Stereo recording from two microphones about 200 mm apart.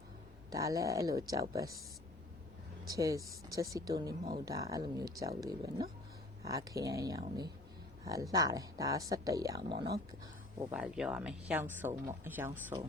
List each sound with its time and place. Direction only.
0.5 s speech: 15° right (ahead or behind)
2.8 s speech: 15° right (ahead or behind)
10.6 s speech: 5° right (ahead or behind)